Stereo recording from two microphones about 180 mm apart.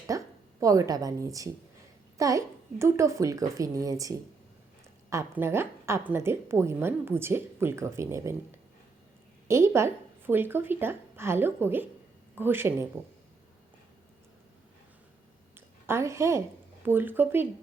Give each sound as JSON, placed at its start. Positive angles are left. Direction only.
{"t": 0.1, "sound": "a sound", "side_deg": -20}
{"t": 0.6, "sound": "a woman's voice", "side_deg": -20}
{"t": 9.5, "sound": "a woman's voice", "side_deg": -15}
{"t": 15.9, "sound": "a woman's voice", "side_deg": -15}